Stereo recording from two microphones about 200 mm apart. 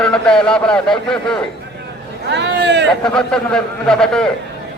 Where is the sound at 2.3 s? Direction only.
60° right (ahead or behind).